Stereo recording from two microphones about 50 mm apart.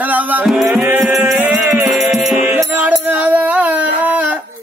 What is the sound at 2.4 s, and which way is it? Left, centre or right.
Music, right.